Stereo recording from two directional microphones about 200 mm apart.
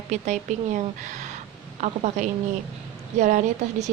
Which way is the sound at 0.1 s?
35° right (ahead or behind).